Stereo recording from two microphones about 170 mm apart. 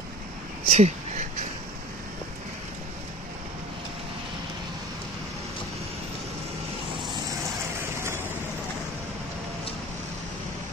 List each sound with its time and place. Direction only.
0.7 s speech: 40° right (ahead or behind)